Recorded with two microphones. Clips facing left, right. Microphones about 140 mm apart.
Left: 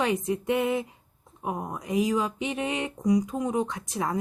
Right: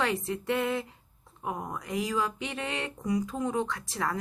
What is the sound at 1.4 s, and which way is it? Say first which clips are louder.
A woman's voice: left 3 dB; 20° left (ahead or behind).